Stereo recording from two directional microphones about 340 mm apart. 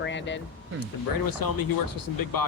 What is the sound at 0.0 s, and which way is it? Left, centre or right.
Air conditioning, left.